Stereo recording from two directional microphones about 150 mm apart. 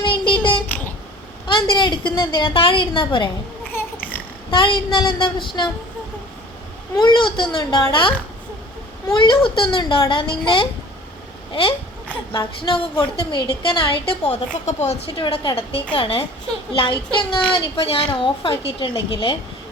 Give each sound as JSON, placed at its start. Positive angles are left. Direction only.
{"t": 0.0, "sound": "child singing", "side_deg": 30}
{"t": 1.5, "sound": "a woman's voice", "side_deg": 35}
{"t": 3.7, "sound": "babbling", "side_deg": 15}
{"t": 4.5, "sound": "a woman's voice", "side_deg": 35}
{"t": 6.9, "sound": "a woman's voice", "side_deg": 30}
{"t": 12.3, "sound": "a woman's voice", "side_deg": 30}
{"t": 14.1, "sound": "a woman's voice", "side_deg": 45}